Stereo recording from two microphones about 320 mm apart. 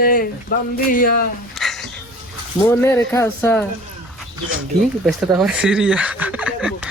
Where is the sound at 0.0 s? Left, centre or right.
Left.